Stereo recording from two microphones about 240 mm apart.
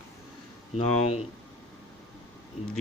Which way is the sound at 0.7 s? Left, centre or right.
Left.